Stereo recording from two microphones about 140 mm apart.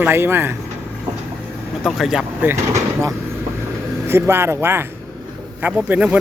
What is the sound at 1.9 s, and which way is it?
Speech, centre (ahead or behind).